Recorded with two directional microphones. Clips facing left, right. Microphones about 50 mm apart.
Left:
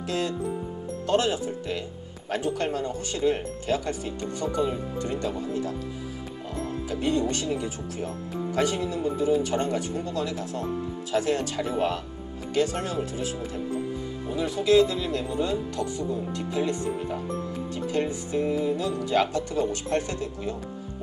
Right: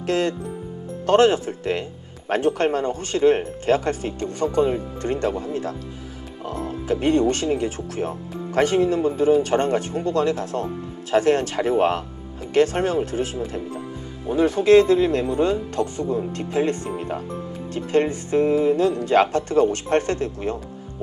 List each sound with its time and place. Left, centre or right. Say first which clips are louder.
0.0 s speech: right 5 dB; right